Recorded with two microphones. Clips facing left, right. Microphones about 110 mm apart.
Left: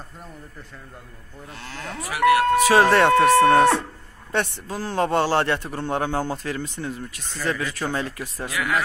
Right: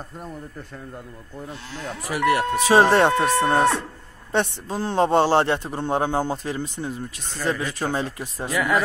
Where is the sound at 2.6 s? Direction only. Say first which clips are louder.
Right 4 dB; 25° right (ahead or behind).